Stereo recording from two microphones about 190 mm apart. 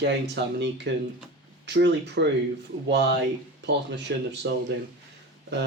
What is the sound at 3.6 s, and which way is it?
Speech, 65° right (ahead or behind).